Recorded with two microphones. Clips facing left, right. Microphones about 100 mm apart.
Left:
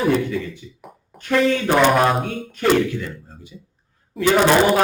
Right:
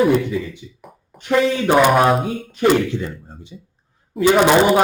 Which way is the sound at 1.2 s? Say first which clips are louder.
Right 1 dB; 15° right (ahead or behind).